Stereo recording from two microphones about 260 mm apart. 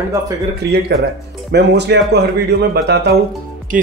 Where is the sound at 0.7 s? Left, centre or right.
Right.